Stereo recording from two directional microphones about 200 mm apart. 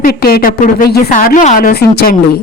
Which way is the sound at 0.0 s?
50° left (ahead or behind).